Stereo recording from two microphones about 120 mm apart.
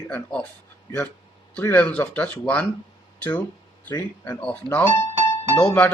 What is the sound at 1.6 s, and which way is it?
Speech, 15° left (ahead or behind).